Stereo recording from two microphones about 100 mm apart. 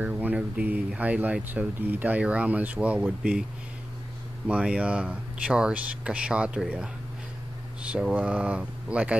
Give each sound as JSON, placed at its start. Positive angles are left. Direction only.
{"t": 0.0, "sound": "speech", "side_deg": -15}
{"t": 4.5, "sound": "speech", "side_deg": -10}